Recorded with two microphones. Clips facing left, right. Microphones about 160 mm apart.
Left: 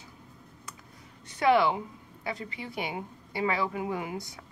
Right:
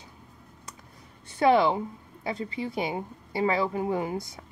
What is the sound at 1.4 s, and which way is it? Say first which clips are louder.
A woman's voice: right 2 dB; 30° right (ahead or behind).